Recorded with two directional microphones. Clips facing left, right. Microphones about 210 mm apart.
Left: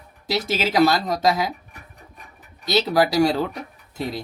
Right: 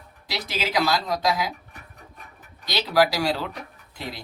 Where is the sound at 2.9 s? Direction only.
45° left (ahead or behind).